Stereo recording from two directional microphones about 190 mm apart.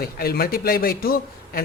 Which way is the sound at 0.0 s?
55° left (ahead or behind).